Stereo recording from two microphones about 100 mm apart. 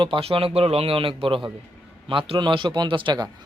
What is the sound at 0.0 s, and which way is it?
Speech, 65° right (ahead or behind).